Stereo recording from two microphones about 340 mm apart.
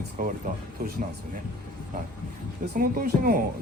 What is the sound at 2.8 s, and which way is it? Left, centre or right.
Speech, right.